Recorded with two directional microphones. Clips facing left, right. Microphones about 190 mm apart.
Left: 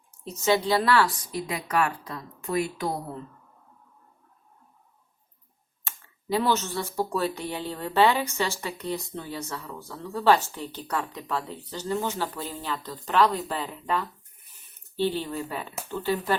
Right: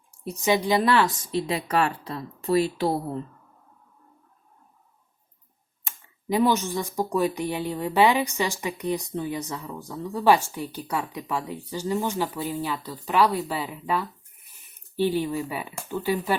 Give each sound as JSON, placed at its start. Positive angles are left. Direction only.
{"t": 0.3, "sound": "a woman's voice", "side_deg": -15}
{"t": 5.8, "sound": "speech", "side_deg": -15}